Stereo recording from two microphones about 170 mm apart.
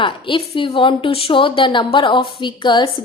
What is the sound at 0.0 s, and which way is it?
A woman's voice, 30° left (ahead or behind).